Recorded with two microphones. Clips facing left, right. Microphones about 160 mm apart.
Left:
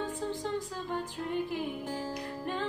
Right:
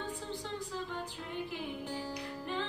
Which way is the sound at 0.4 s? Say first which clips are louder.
Left 5 dB; 50° left (ahead or behind).